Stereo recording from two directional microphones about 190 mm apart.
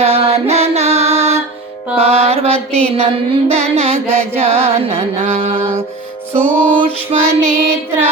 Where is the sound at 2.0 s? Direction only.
35° right (ahead or behind).